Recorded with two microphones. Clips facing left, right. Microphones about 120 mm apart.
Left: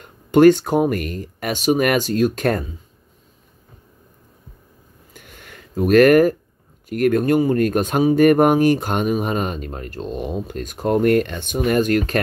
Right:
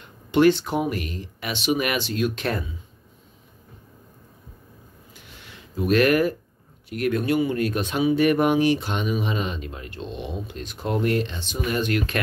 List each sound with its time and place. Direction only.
0.0 s speech: 45° left (ahead or behind)
5.1 s a sound: 50° left (ahead or behind)
6.9 s speech: 50° left (ahead or behind)